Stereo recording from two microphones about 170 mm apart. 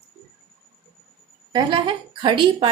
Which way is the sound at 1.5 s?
25° right (ahead or behind).